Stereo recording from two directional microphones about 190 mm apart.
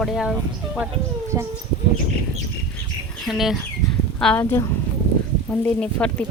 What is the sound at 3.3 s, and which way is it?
A woman's voice, centre (ahead or behind).